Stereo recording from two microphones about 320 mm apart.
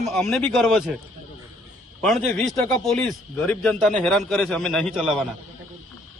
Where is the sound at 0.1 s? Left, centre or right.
Centre.